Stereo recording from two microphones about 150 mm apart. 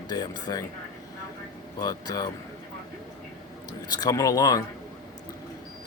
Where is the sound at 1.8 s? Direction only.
25° left (ahead or behind).